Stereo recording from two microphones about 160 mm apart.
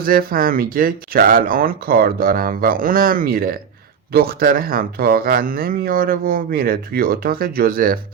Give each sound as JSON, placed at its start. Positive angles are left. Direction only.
{"t": 0.0, "sound": "speech", "side_deg": -65}